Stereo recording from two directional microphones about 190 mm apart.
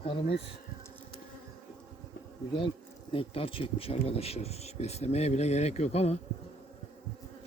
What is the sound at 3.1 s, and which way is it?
Speech, 30° left (ahead or behind).